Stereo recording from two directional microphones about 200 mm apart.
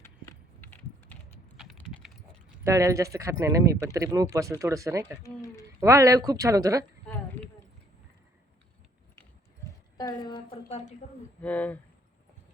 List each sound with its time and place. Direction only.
0.0 s a sound: 10° left (ahead or behind)
2.6 s speech: 15° right (ahead or behind)
5.2 s speech: 15° left (ahead or behind)
5.8 s speech: 15° right (ahead or behind)
10.0 s a sound: 20° left (ahead or behind)
10.7 s speech: 35° left (ahead or behind)
11.4 s speech: 5° left (ahead or behind)